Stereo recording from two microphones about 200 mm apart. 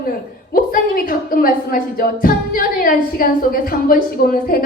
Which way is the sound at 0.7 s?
45° left (ahead or behind).